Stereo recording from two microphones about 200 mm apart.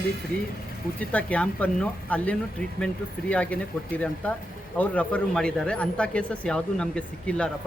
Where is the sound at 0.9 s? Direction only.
5° left (ahead or behind).